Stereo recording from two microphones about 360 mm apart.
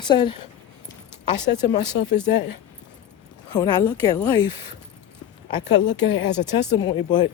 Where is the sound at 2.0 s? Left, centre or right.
Left.